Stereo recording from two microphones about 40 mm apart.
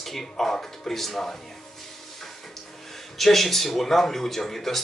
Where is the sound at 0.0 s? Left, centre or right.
Centre.